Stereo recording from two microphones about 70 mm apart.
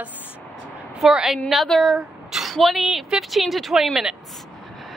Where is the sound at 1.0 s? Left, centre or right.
Centre.